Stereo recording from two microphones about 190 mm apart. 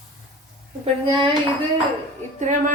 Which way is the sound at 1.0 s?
25° right (ahead or behind).